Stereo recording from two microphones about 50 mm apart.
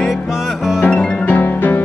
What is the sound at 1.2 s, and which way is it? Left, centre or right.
Music, left.